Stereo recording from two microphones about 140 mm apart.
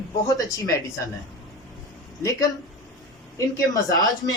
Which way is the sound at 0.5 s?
25° left (ahead or behind).